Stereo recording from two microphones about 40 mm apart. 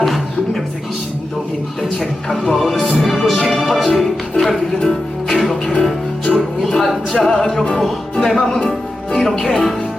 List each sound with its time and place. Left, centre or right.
0.0 s music: centre
2.5 s music: centre
3.5 s music: centre
3.8 s music: centre
6.7 s a capella: centre
8.2 s music: centre
9.1 s speech: centre